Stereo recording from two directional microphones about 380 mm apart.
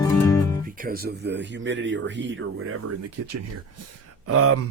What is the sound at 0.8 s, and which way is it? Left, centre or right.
Speech, right.